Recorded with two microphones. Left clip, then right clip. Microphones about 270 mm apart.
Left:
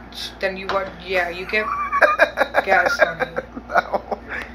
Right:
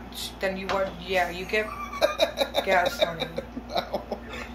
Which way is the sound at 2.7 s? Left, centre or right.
Centre.